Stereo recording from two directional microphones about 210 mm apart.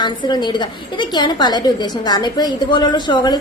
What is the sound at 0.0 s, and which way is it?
A woman's voice, 20° left (ahead or behind).